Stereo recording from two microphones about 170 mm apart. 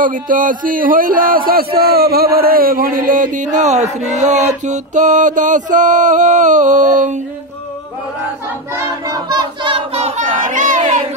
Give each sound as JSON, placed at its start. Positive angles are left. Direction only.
{"t": 0.0, "sound": "speech", "side_deg": -50}
{"t": 1.8, "sound": "chant", "side_deg": -65}
{"t": 8.7, "sound": "child singing", "side_deg": -20}